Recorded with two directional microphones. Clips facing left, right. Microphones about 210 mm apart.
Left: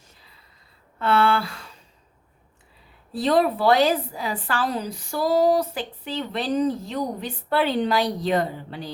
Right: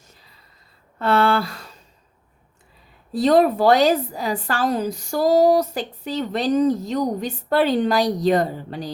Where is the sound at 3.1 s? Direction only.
45° right (ahead or behind).